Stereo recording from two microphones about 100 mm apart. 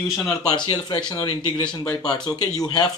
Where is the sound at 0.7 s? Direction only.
45° left (ahead or behind).